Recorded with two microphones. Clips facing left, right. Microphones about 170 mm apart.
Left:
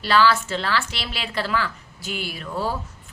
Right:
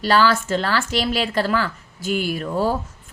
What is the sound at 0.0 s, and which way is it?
A woman's voice, 45° right (ahead or behind).